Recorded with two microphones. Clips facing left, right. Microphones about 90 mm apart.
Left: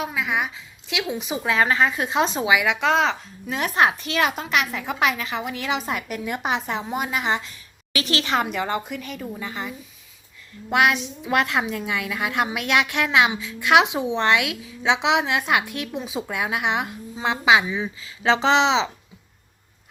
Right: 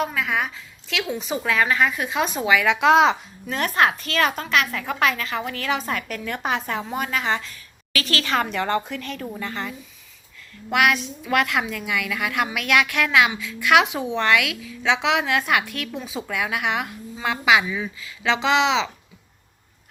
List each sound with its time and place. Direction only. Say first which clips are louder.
0.0 s a woman's voice: right 1 dB; 10° left (ahead or behind)
1.5 s a woman's voice: left 1 dB; 25° left (ahead or behind)
2.4 s a woman's voice: right 4 dB; 15° left (ahead or behind)
2.8 s a woman's voice: right 5 dB; 10° right (ahead or behind)
3.4 s speech: even; 5° left (ahead or behind)
3.8 s a woman's voice: even; 15° left (ahead or behind)
10.7 s a woman's voice: even; 25° left (ahead or behind)